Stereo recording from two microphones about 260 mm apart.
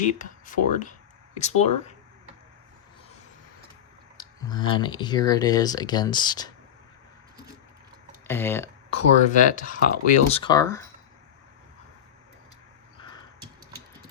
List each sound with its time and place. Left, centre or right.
0.2 s speech: left
4.2 s speech: centre
8.3 s speech: centre
8.9 s speech: left; by 10.8 s centre
13.0 s a sound: centre